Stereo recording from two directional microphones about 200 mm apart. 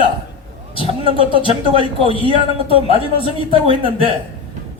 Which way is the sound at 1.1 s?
25° right (ahead or behind).